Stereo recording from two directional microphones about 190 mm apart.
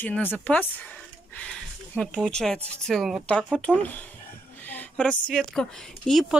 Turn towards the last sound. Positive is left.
turn(degrees=0)  # may be behind; listen again after turning